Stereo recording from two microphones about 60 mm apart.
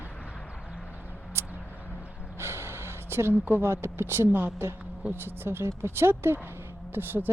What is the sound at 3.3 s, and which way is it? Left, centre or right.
Speech, right.